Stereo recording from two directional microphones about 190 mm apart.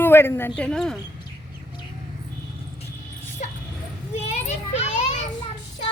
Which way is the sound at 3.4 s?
40° left (ahead or behind).